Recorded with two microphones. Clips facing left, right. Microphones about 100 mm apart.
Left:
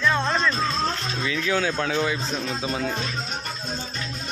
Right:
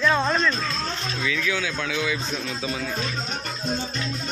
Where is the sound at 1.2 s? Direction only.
30° left (ahead or behind).